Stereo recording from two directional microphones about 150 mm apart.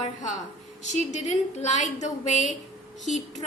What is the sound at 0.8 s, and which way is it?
A woman's voice, 50° left (ahead or behind).